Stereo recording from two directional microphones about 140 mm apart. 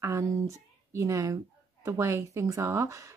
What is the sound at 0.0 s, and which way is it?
Speech, 20° right (ahead or behind).